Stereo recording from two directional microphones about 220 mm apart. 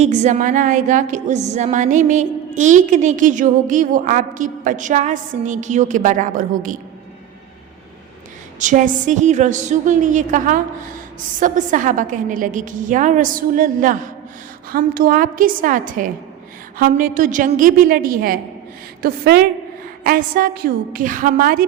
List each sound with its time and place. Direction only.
0.0 s a woman's voice: 30° right (ahead or behind)
8.5 s a woman's voice: 35° right (ahead or behind)